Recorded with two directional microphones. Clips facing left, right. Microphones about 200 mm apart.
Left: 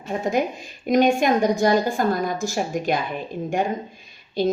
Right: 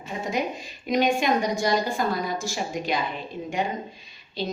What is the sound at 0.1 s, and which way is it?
Speech, 50° left (ahead or behind).